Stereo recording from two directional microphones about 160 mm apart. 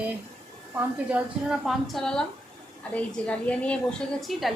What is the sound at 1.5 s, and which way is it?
A woman's voice, centre (ahead or behind).